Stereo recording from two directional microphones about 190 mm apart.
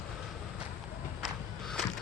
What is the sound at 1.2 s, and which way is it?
Walk, centre (ahead or behind).